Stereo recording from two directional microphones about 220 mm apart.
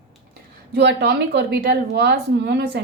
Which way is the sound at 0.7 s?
50° right (ahead or behind).